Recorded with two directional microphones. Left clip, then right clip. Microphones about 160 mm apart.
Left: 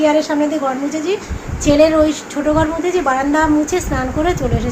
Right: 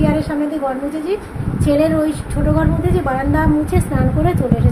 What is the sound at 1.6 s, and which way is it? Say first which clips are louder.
A woman's voice: left 4 dB; 15° left (ahead or behind).